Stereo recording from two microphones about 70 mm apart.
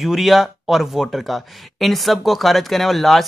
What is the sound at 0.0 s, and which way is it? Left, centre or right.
Speech, centre.